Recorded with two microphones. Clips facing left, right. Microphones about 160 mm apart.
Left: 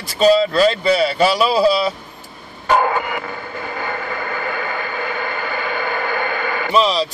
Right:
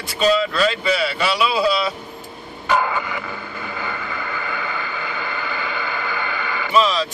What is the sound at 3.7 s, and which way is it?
Vehicle, 50° left (ahead or behind).